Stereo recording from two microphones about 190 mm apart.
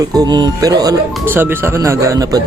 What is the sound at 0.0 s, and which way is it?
Speech, 20° right (ahead or behind).